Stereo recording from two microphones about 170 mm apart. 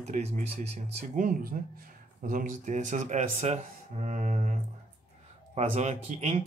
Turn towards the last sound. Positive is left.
turn(degrees=-40)  # may be behind; listen again after turning